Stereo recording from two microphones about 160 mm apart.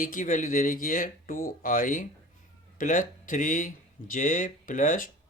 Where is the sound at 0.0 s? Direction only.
55° left (ahead or behind).